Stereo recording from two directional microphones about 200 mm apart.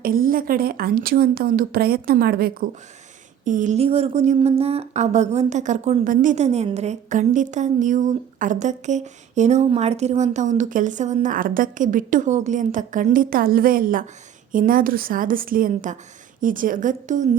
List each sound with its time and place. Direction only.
0.0 s a woman's voice: 45° right (ahead or behind)